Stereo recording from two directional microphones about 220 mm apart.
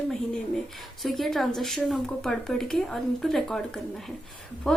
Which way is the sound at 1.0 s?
Centre (ahead or behind).